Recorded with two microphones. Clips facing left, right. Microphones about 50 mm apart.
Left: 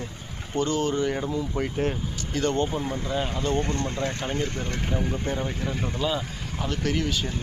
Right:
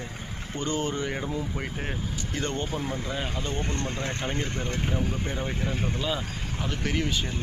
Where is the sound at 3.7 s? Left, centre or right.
Right.